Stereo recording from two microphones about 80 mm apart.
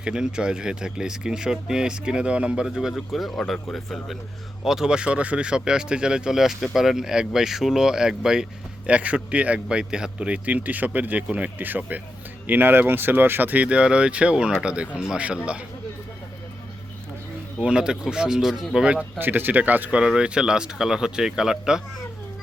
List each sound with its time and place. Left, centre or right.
0.0 s speech: centre
17.6 s speech: centre
19.2 s speech: right; by 21.8 s centre